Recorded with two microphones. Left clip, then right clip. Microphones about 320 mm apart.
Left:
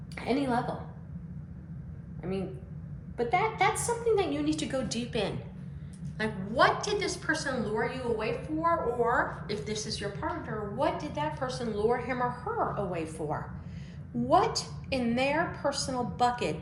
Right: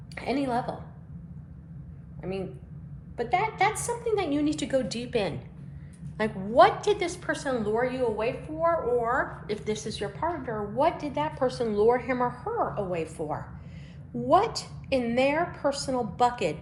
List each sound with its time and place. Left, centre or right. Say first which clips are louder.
0.2 s a woman's voice: right 1 dB; right
3.2 s a woman's voice: right 2 dB; right
6.1 s a woman's voice: right 6 dB; centre